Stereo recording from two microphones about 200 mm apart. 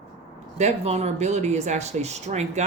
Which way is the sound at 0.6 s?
35° right (ahead or behind).